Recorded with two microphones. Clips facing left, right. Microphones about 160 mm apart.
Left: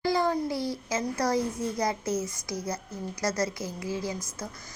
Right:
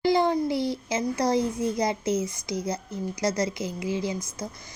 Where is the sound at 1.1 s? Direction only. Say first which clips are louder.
Right 3 dB; 20° right (ahead or behind).